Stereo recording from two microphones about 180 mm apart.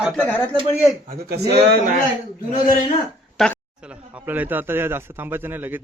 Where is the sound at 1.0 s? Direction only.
55° right (ahead or behind).